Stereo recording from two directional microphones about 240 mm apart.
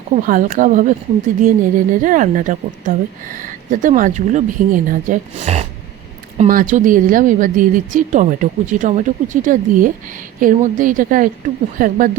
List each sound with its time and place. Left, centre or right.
0.2 s a woman's voice: right